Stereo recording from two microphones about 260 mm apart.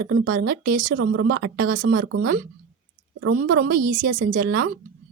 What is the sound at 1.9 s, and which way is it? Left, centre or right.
Speech, right.